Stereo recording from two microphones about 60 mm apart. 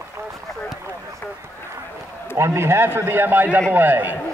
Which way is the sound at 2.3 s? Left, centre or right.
Right.